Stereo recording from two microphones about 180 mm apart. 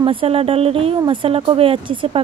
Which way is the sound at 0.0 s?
30° right (ahead or behind).